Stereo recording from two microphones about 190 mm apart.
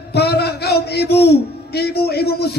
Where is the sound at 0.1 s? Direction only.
60° left (ahead or behind).